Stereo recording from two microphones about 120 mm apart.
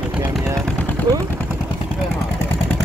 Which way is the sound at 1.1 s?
35° right (ahead or behind).